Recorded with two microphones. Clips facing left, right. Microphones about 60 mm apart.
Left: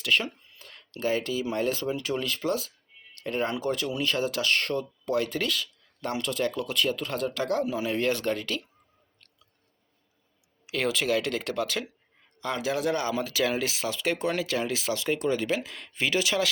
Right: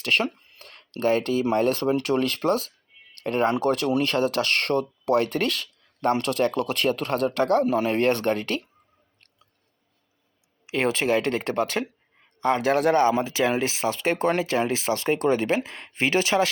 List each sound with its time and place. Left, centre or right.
0.0 s speech: right
10.7 s speech: right